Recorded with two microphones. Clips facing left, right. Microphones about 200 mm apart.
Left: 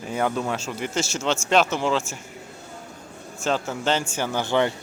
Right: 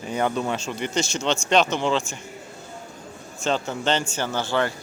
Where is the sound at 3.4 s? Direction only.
5° left (ahead or behind).